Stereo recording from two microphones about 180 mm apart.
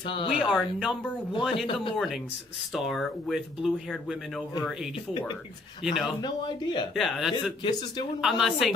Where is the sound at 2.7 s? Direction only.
Centre (ahead or behind).